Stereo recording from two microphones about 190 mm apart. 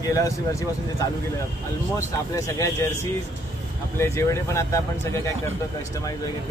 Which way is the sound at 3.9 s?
15° left (ahead or behind).